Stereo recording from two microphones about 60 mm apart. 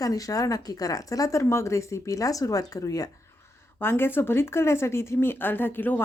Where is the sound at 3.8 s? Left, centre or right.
Left.